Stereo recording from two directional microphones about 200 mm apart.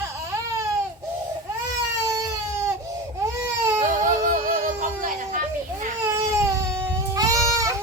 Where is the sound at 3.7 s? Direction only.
40° right (ahead or behind).